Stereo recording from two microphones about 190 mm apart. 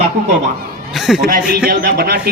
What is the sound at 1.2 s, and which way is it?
Speech, 50° right (ahead or behind).